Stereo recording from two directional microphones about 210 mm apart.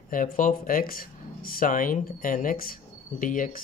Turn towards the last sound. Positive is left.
turn(degrees=40)  # may be behind; listen again after turning